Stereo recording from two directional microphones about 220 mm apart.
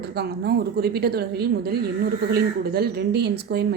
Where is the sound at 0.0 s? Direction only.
45° right (ahead or behind).